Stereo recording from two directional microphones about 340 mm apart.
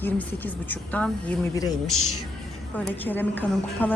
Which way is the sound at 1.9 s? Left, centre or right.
Left.